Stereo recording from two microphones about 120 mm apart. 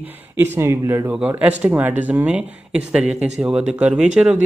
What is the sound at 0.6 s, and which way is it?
Speech, 20° right (ahead or behind).